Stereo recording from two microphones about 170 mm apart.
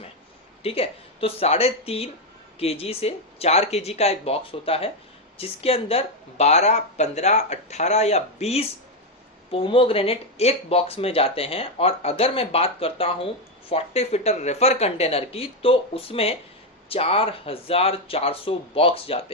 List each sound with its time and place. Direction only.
0.6 s speech: 35° left (ahead or behind)